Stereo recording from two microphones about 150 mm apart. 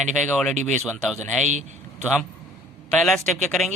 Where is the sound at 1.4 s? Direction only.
50° right (ahead or behind).